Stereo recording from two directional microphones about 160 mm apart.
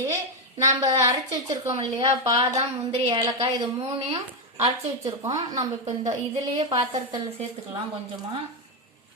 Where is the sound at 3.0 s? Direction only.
25° right (ahead or behind).